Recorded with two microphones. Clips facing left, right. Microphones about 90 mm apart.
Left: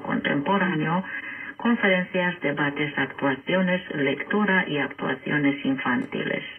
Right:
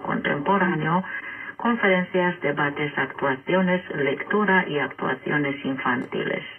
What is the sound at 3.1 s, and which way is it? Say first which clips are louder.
Speech: right 2 dB; 15° right (ahead or behind).